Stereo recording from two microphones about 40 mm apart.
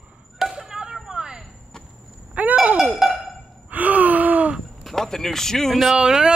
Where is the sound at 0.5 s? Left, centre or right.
Centre.